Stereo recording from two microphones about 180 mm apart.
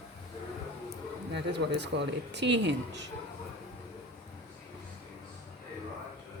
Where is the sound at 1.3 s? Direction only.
70° right (ahead or behind).